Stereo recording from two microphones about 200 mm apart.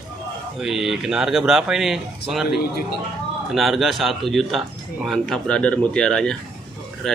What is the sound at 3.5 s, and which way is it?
Speech, centre (ahead or behind).